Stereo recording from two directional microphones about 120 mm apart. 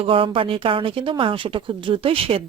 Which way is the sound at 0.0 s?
50° right (ahead or behind).